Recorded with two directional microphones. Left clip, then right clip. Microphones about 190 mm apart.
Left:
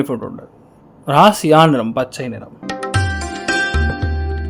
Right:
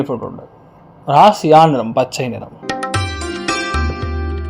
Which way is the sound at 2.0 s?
Centre (ahead or behind).